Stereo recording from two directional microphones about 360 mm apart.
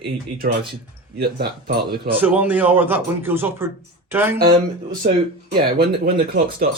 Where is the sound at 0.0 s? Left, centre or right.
Right.